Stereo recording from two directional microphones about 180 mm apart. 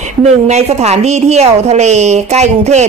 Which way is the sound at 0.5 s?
35° right (ahead or behind).